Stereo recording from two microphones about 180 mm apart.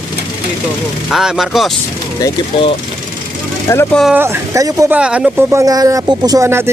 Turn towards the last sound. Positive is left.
turn(degrees=-15)  # may be behind; listen again after turning